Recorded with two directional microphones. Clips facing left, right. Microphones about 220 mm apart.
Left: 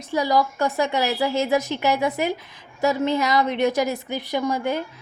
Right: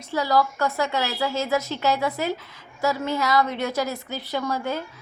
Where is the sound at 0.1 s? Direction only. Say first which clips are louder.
Left 1 dB; 15° left (ahead or behind).